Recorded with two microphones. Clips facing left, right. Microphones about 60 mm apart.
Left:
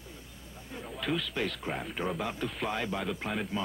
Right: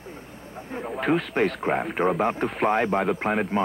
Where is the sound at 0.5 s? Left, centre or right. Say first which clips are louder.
Right 10 dB; right.